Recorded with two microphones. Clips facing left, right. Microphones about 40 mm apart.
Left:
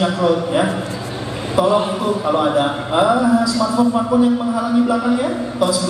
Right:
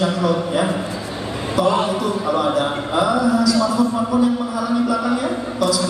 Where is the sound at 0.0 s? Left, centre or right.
Left.